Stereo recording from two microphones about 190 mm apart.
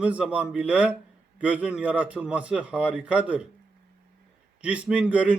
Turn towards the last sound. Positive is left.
turn(degrees=-5)  # may be behind; listen again after turning